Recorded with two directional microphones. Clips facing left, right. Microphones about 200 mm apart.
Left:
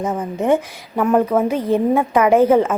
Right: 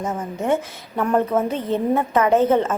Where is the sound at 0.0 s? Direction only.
15° left (ahead or behind).